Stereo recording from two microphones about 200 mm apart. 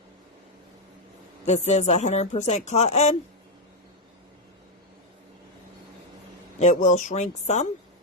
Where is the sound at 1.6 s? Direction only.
35° left (ahead or behind).